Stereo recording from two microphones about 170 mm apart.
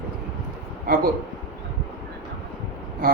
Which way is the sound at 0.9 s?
60° right (ahead or behind).